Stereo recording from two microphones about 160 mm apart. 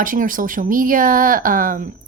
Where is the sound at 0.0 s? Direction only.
55° right (ahead or behind).